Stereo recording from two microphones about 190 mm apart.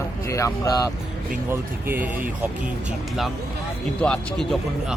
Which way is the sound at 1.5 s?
10° right (ahead or behind).